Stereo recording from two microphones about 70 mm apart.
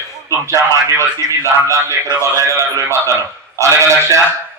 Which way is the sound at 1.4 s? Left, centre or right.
Right.